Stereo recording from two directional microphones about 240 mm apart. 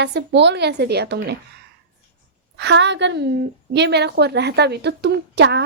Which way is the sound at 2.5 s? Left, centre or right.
Right.